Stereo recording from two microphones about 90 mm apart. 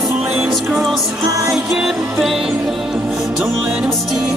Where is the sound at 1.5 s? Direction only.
5° right (ahead or behind).